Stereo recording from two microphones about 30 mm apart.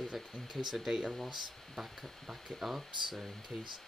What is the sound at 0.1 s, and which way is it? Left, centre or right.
Speech, centre.